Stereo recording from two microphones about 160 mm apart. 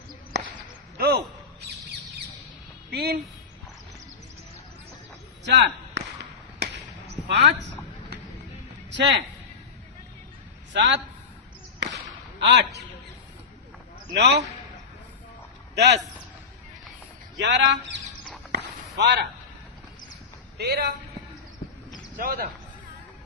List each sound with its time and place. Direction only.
0.9 s a sound: 80° right
2.9 s speech: 80° right
5.5 s a sound: 90° right
7.3 s speech: 90° right
8.9 s a man's voice: 90° right
10.7 s a man's voice: 90° right
11.8 s whip: 90° right
12.5 s a man's voice: 90° right
14.2 s a man's voice: 90° right
15.7 s speech: 90° right
17.3 s a man's voice: 90° right
18.5 s a sound: 90° right
20.6 s a man's voice: 85° right
22.2 s speech: 65° right (ahead or behind)